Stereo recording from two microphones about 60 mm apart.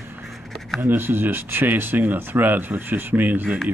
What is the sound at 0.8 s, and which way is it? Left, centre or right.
Speech, right.